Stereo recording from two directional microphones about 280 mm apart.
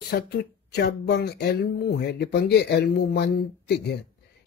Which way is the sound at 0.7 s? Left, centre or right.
Left.